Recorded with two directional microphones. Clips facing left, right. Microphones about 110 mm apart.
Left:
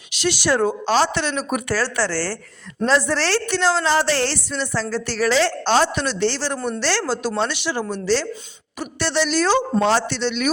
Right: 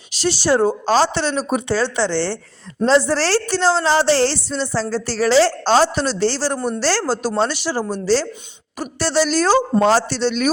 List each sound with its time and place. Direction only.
0.1 s a woman's voice: 35° right (ahead or behind)